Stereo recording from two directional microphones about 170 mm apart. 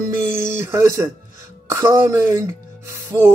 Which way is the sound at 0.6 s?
15° right (ahead or behind).